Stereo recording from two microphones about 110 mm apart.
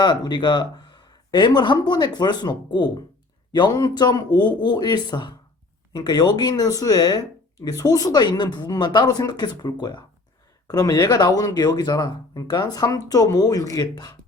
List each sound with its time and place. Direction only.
0.0 s speech: 45° left (ahead or behind)